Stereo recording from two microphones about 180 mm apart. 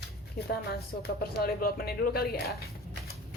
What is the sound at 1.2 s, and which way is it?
Speech, 55° left (ahead or behind).